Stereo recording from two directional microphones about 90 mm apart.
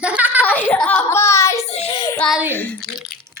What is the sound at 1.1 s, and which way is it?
Speech, 30° left (ahead or behind).